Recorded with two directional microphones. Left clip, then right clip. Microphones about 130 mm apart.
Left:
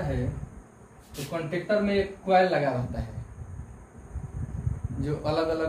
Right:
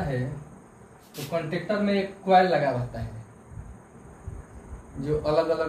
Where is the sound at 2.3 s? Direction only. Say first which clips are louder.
Right 3 dB; 30° left (ahead or behind).